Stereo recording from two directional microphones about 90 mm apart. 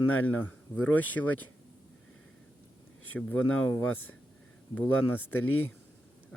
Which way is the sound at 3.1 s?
15° left (ahead or behind).